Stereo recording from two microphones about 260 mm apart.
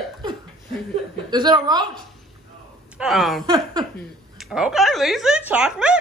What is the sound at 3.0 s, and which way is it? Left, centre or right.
Speech, centre.